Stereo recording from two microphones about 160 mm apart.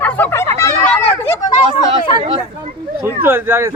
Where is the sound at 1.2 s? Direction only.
25° left (ahead or behind).